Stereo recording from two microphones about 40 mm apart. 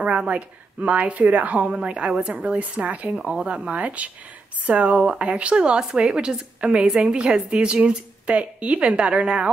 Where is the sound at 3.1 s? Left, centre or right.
Right.